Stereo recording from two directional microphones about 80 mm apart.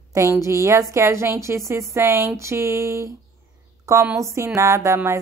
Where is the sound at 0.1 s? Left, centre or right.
Right.